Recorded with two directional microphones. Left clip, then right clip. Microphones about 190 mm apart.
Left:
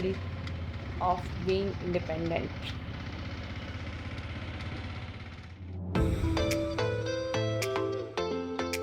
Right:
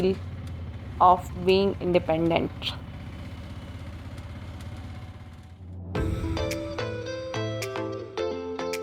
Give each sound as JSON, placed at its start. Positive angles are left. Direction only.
{"t": 0.9, "sound": "speech", "side_deg": -40}
{"t": 5.9, "sound": "music", "side_deg": 0}